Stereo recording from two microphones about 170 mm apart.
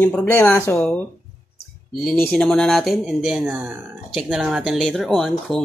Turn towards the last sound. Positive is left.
turn(degrees=0)  # may be behind; listen again after turning